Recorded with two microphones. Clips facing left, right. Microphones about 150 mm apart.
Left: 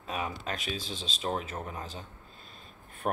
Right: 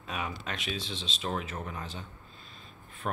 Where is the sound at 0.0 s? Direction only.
35° left (ahead or behind).